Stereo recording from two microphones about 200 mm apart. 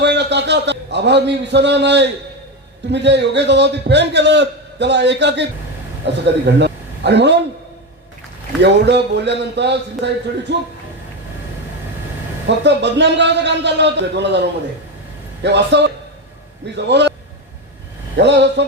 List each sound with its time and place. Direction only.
0.0 s a man's voice: 60° right (ahead or behind)
8.6 s a man's voice: 60° right (ahead or behind)
12.5 s a man's voice: 60° right (ahead or behind)
15.4 s a man's voice: 60° right (ahead or behind)
18.2 s a man's voice: 60° right (ahead or behind)